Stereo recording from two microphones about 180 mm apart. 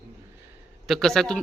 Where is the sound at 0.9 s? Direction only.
Centre (ahead or behind).